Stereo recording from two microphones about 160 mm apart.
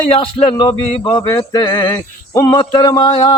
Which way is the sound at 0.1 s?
35° left (ahead or behind).